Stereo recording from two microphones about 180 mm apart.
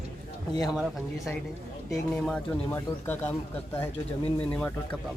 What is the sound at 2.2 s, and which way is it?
Speech, 10° left (ahead or behind).